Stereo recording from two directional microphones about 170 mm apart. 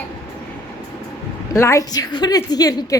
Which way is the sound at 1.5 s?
20° left (ahead or behind).